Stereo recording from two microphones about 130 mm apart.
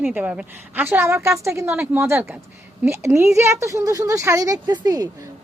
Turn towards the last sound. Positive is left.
turn(degrees=-30)  # may be behind; listen again after turning